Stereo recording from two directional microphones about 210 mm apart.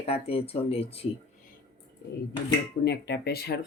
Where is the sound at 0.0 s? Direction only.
30° left (ahead or behind).